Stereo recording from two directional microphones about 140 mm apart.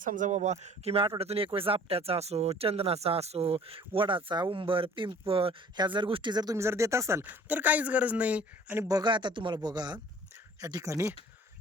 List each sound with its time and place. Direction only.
0.0 s speech: 70° right (ahead or behind); by 11.1 s 20° right (ahead or behind)